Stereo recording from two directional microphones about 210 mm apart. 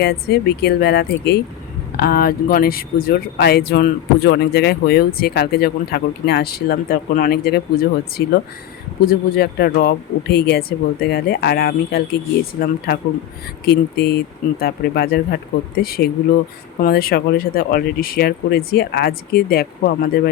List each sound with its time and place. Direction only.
0.0 s speech: 50° left (ahead or behind)